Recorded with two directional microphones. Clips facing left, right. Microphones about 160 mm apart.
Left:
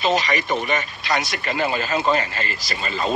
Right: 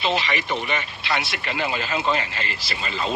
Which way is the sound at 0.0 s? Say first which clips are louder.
Left 3 dB; 45° left (ahead or behind).